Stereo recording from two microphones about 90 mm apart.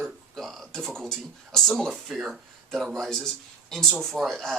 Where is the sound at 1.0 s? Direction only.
5° left (ahead or behind).